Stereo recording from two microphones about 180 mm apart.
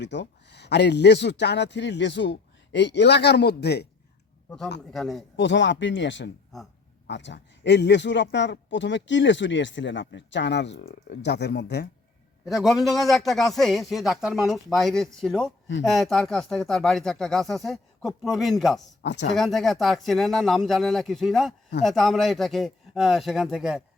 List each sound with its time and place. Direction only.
0.0 s speech: 75° left (ahead or behind)
4.9 s a man's voice: centre (ahead or behind)
5.4 s speech: 80° left
12.5 s a man's voice: centre (ahead or behind)
19.0 s speech: 75° left (ahead or behind)
19.4 s a man's voice: centre (ahead or behind)